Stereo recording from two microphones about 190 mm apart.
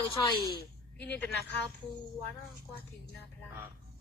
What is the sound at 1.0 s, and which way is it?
Speech, 60° left (ahead or behind).